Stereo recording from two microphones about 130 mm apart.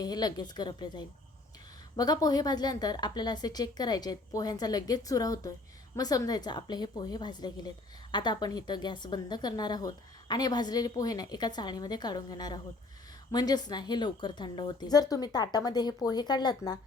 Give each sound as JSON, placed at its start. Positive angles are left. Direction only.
{"t": 0.0, "sound": "a woman's voice", "side_deg": 30}